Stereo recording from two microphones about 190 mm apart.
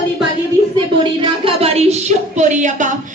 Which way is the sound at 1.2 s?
30° right (ahead or behind).